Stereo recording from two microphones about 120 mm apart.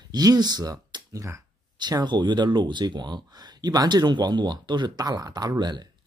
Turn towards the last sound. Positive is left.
turn(degrees=-35)  # may be behind; listen again after turning